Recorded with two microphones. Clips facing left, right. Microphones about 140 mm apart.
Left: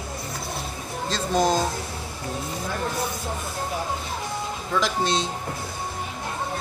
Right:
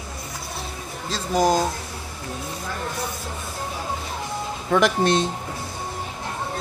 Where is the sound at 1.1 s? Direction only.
10° right (ahead or behind).